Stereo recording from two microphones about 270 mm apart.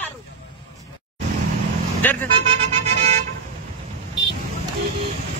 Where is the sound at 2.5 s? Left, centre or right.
Right.